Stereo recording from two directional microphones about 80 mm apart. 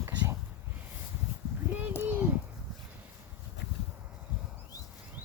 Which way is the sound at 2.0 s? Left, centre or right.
Right.